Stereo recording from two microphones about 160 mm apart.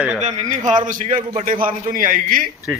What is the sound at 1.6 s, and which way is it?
Speech, 60° right (ahead or behind).